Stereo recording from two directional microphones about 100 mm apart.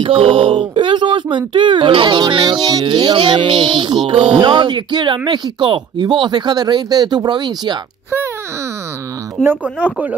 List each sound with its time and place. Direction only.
0.0 s speech: 65° right (ahead or behind); by 7.7 s 50° right (ahead or behind)
9.4 s speech: 15° right (ahead or behind)